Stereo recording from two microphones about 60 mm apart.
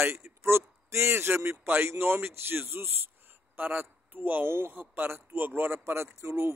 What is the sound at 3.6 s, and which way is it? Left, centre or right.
A man's voice, right.